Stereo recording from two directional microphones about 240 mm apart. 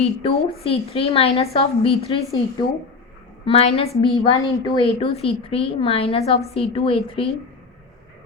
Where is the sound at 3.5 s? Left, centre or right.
Left.